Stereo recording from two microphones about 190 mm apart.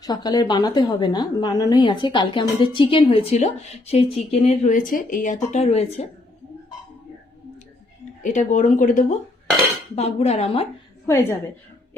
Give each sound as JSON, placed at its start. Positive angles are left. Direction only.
{"t": 0.0, "sound": "a woman's voice", "side_deg": 20}
{"t": 8.2, "sound": "speech", "side_deg": 40}
{"t": 11.0, "sound": "a woman's voice", "side_deg": 10}